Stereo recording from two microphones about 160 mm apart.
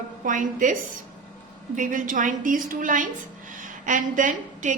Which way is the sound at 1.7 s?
55° right (ahead or behind).